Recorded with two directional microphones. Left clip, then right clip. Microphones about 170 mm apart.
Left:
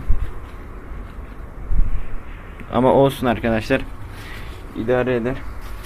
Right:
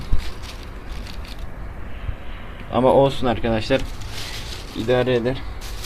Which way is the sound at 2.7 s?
5° right (ahead or behind).